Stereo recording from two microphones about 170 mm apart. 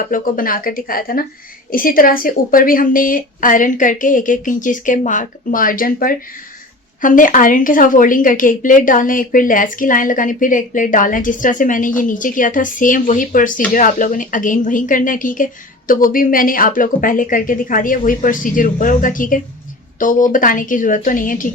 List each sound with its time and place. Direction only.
0.1 s a woman's voice: 55° left (ahead or behind)